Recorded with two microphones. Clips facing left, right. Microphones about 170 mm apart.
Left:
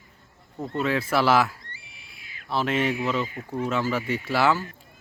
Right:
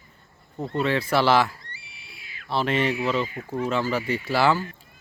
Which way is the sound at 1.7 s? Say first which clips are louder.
Right 1 dB; 45° left (ahead or behind).